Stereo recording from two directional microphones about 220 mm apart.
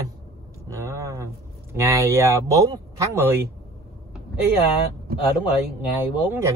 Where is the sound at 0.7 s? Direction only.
15° right (ahead or behind).